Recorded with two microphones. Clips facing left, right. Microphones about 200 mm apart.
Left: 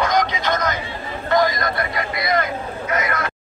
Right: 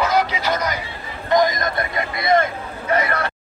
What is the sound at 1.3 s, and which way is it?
Vehicle, 20° right (ahead or behind).